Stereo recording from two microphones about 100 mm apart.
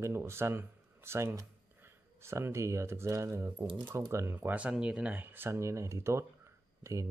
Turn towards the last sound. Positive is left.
turn(degrees=-30)  # may be behind; listen again after turning